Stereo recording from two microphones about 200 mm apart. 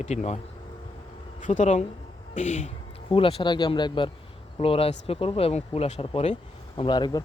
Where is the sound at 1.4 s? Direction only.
35° left (ahead or behind).